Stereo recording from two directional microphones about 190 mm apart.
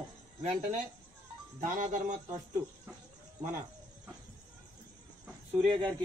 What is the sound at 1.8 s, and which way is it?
Speech, 40° right (ahead or behind).